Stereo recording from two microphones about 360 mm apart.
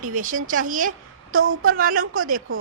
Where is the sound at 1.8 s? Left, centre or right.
Right.